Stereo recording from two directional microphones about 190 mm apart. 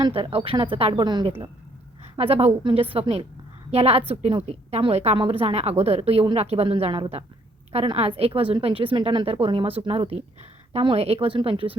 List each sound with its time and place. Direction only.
0.0 s a woman's voice: 30° right (ahead or behind)